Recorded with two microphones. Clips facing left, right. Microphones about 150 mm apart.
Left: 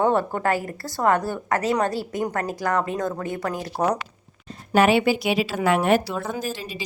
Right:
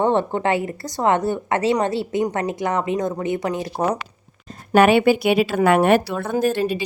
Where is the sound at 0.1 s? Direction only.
25° right (ahead or behind).